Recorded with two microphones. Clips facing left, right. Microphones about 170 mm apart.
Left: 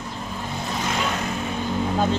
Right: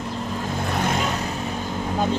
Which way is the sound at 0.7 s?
55° right (ahead or behind).